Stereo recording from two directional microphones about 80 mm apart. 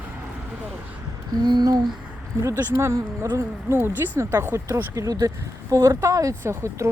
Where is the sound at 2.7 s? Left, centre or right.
Right.